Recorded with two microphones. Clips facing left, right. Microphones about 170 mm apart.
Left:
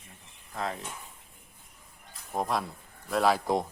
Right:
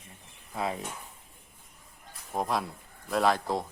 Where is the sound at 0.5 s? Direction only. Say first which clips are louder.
Right 2 dB; 10° right (ahead or behind).